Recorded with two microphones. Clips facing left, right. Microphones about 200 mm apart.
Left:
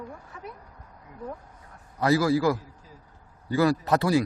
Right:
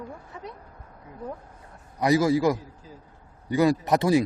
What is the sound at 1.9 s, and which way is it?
Speech, 20° right (ahead or behind).